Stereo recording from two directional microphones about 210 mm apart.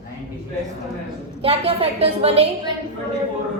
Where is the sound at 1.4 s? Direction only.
30° right (ahead or behind).